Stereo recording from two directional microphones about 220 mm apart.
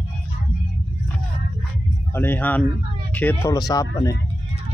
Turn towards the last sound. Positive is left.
turn(degrees=15)  # may be behind; listen again after turning